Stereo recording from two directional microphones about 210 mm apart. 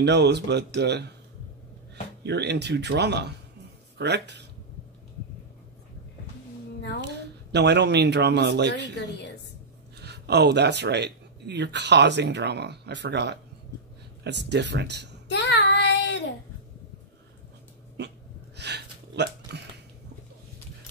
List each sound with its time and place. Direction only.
0.0 s speech: 55° right (ahead or behind)
2.2 s speech: 55° right (ahead or behind)
7.0 s a woman's voice: 55° right (ahead or behind)
8.9 s a woman's voice: 55° left (ahead or behind)
9.9 s speech: 50° right (ahead or behind)
15.2 s child singing: 55° left (ahead or behind)
18.6 s a sound: 55° right (ahead or behind)